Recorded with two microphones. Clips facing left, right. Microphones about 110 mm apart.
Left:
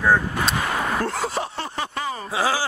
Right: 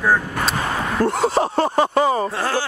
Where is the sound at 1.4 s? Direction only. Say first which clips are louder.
Right 11 dB; 45° right (ahead or behind).